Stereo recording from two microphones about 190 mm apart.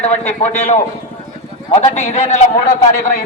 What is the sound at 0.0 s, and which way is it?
A man's voice, 35° left (ahead or behind).